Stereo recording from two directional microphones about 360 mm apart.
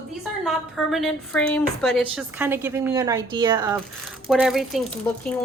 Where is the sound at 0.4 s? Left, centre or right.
Centre.